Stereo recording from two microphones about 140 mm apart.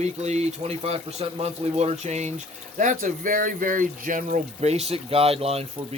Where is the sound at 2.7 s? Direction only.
70° right (ahead or behind); by 5.6 s 45° right (ahead or behind).